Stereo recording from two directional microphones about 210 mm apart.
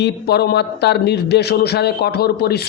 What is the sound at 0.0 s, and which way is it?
A man's voice, 50° left (ahead or behind).